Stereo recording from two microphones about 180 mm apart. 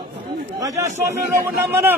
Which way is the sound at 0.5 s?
15° right (ahead or behind).